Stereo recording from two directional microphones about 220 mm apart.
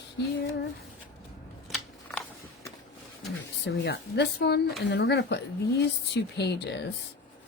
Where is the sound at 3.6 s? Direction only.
50° left (ahead or behind).